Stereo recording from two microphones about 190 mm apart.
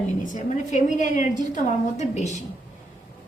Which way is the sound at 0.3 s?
40° left (ahead or behind).